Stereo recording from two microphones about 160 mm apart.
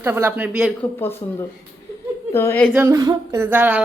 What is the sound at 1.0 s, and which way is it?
Speech, 15° left (ahead or behind).